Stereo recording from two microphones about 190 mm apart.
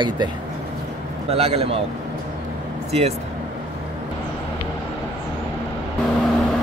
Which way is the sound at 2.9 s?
35° right (ahead or behind).